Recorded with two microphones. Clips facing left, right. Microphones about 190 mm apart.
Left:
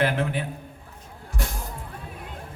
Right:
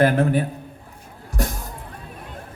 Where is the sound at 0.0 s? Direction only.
45° right (ahead or behind).